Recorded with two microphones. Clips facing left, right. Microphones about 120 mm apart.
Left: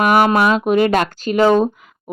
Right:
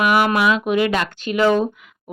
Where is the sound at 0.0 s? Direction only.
40° left (ahead or behind).